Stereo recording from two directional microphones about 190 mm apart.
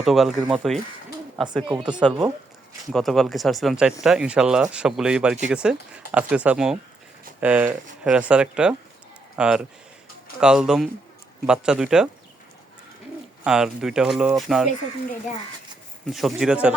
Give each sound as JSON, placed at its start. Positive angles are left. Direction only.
{"t": 0.0, "sound": "speech", "side_deg": 0}
{"t": 13.4, "sound": "speech", "side_deg": -5}
{"t": 16.0, "sound": "speech", "side_deg": 0}